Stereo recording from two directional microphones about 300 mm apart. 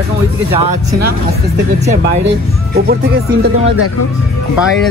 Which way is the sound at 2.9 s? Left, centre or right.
Right.